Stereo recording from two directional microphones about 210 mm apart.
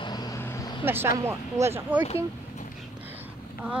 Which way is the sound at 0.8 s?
10° right (ahead or behind).